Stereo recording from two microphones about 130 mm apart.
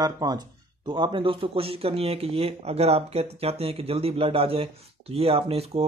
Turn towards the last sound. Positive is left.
turn(degrees=-50)  # may be behind; listen again after turning